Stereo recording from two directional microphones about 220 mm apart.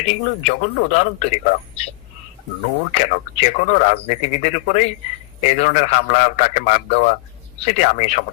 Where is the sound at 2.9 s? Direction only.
30° left (ahead or behind).